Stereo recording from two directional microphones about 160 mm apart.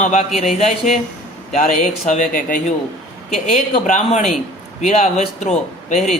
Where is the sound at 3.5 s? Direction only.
45° left (ahead or behind).